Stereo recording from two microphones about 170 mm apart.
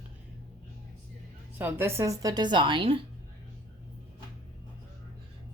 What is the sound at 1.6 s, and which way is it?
A woman's voice, 10° right (ahead or behind).